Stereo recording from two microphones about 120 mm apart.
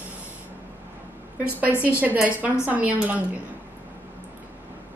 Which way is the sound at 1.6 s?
15° right (ahead or behind).